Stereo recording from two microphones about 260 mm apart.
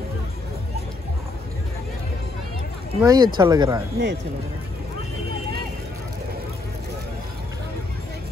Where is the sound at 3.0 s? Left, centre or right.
Centre.